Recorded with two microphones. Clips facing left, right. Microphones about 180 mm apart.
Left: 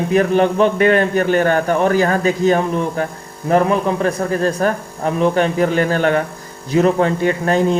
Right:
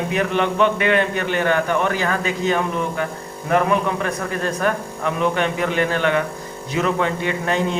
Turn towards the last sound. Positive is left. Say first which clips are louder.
# left 6 dB
turn(degrees=40)  # may be behind; listen again after turning